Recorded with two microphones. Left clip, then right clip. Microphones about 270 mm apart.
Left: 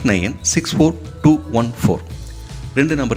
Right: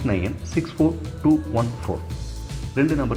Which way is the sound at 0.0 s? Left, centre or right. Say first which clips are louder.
Left 8 dB; left.